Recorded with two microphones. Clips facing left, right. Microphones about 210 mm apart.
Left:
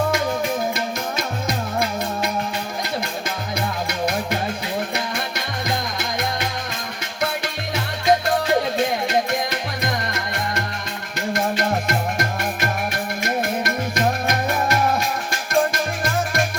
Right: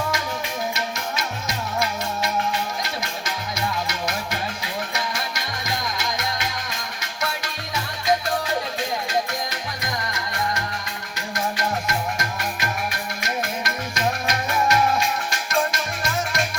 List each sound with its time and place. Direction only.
1.1 s music: 55° left (ahead or behind)
3.8 s music: 55° left (ahead or behind)
11.3 s music: 60° left (ahead or behind)